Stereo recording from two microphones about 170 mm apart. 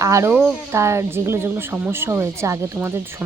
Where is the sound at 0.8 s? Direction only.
15° right (ahead or behind).